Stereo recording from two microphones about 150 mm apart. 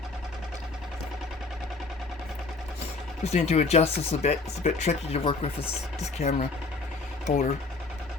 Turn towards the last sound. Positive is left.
turn(degrees=60)  # may be behind; listen again after turning